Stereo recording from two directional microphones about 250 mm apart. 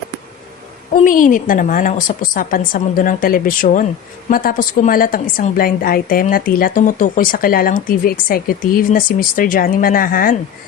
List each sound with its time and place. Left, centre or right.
0.9 s a woman's voice: left